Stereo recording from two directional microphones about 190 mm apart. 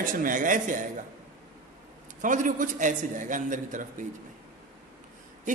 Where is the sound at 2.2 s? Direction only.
45° right (ahead or behind).